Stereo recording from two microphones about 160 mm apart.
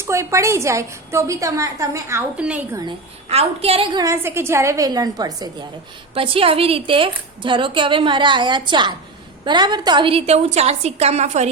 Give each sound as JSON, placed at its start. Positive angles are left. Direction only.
{"t": 0.0, "sound": "a woman's voice", "side_deg": -15}
{"t": 3.2, "sound": "a woman's voice", "side_deg": -40}
{"t": 3.9, "sound": "a woman's voice", "side_deg": -20}
{"t": 6.1, "sound": "a woman's voice", "side_deg": -35}